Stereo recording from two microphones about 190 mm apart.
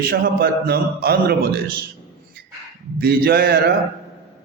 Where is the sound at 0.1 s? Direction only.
55° right (ahead or behind).